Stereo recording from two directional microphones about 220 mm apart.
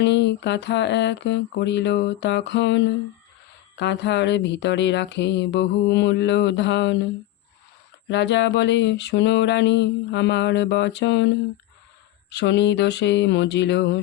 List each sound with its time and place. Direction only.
0.0 s mantra: 50° left (ahead or behind)
8.1 s mantra: 55° left (ahead or behind)
12.3 s mantra: 50° left (ahead or behind)